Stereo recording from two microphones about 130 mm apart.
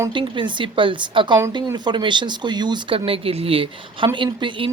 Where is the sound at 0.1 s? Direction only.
40° right (ahead or behind).